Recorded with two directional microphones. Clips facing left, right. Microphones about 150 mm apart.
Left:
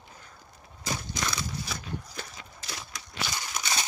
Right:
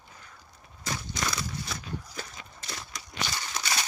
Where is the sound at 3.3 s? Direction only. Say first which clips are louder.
Even; 15° left (ahead or behind).